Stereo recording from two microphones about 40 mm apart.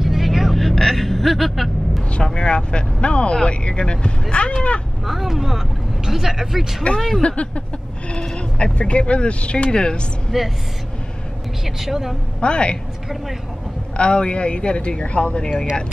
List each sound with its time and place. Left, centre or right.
0.0 s vehicle: centre
0.6 s vehicle: centre
2.1 s speech: left
5.0 s speech: centre
7.0 s speech: centre
7.2 s speech: left
8.7 s speech: left
10.3 s speech: centre
11.6 s speech: centre
12.4 s speech: left
13.9 s speech: left